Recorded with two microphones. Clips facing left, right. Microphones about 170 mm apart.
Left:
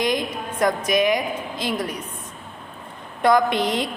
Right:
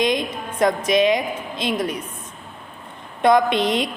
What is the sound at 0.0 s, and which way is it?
A woman's voice, 20° right (ahead or behind).